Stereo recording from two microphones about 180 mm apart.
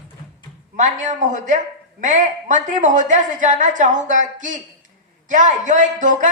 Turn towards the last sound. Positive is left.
turn(degrees=-45)  # may be behind; listen again after turning